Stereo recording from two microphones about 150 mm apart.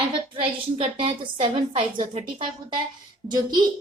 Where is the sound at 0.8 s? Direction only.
40° right (ahead or behind).